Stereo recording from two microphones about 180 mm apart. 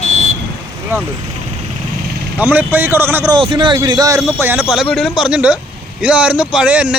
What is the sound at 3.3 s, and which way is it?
Speech, 25° right (ahead or behind).